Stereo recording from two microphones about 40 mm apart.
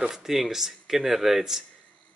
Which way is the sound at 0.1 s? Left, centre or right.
Centre.